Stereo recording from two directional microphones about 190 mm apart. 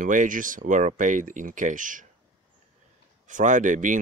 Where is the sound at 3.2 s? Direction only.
40° right (ahead or behind).